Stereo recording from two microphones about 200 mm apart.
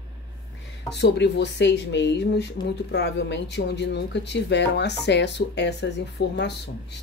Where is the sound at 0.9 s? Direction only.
55° left (ahead or behind).